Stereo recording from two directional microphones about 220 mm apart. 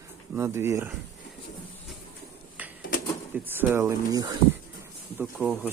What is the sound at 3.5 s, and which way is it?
Speech, 10° right (ahead or behind).